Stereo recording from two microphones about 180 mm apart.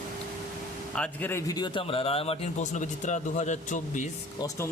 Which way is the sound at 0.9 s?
5° left (ahead or behind).